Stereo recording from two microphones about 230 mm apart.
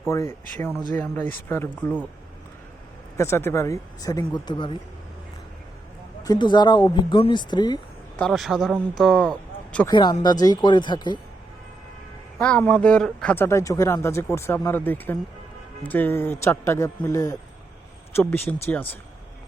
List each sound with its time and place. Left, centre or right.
0.1 s speech: centre
3.2 s speech: centre
6.2 s speech: centre
8.2 s a man's voice: centre
9.9 s speech: centre
12.4 s speech: centre